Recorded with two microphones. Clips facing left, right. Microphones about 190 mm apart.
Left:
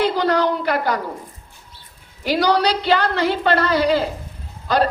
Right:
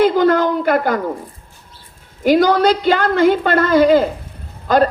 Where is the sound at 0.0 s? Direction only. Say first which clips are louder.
Right 5 dB; 50° right (ahead or behind).